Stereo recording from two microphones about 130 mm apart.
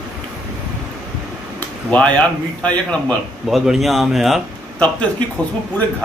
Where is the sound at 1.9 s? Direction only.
10° left (ahead or behind).